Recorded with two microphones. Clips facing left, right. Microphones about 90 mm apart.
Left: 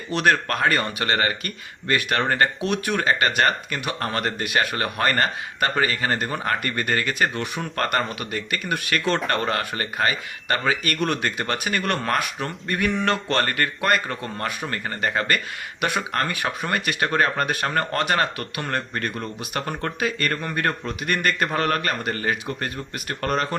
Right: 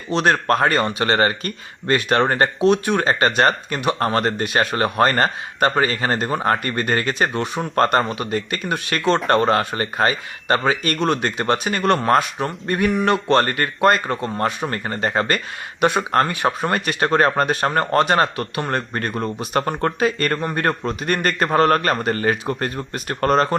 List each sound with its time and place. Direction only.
0.1 s speech: 25° right (ahead or behind)